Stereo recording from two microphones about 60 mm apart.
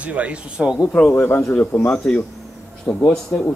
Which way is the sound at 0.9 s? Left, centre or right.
Left.